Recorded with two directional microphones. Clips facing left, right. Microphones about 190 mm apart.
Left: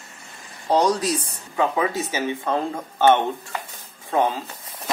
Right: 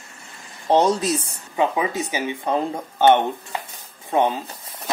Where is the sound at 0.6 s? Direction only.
25° right (ahead or behind).